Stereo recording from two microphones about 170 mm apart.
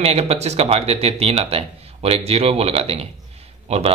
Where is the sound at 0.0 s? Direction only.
35° right (ahead or behind).